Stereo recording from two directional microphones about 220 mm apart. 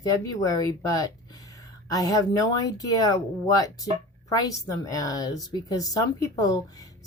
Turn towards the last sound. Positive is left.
turn(degrees=15)  # may be behind; listen again after turning